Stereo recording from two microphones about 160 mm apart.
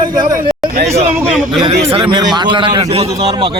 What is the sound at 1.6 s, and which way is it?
A man's voice, 35° right (ahead or behind).